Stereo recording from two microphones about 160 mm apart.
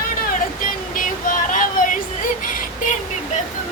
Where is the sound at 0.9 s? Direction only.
60° left (ahead or behind).